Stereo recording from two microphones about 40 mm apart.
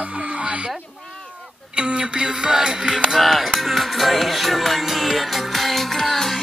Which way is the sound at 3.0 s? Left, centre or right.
Centre.